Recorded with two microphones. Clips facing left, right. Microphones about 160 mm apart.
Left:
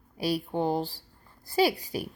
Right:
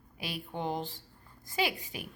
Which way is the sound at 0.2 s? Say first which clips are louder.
Left 9 dB; 35° left (ahead or behind).